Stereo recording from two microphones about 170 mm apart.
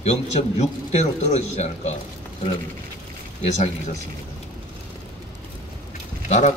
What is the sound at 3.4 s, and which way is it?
Speech, 40° left (ahead or behind).